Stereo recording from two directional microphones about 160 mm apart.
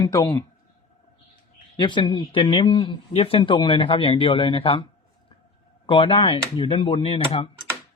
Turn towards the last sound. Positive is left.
turn(degrees=35)  # may be behind; listen again after turning